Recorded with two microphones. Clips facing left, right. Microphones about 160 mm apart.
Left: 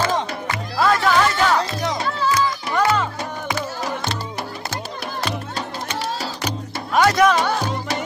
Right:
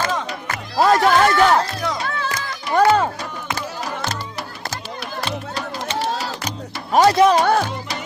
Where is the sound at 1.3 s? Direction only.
55° right (ahead or behind).